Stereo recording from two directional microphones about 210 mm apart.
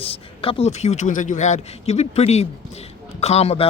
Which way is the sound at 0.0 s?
25° left (ahead or behind).